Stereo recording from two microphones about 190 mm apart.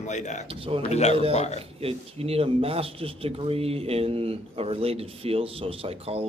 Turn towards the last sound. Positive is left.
turn(degrees=-30)  # may be behind; listen again after turning